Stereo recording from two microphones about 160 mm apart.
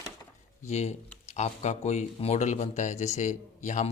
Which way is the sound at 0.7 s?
45° left (ahead or behind).